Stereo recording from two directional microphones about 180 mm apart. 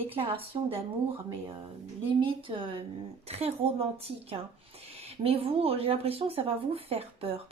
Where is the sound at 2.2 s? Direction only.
30° right (ahead or behind).